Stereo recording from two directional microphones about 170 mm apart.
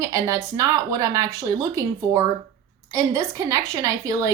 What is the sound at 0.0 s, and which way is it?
A woman's voice, 20° right (ahead or behind).